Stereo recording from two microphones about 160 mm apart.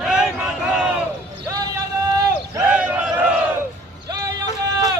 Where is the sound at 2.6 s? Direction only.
5° right (ahead or behind).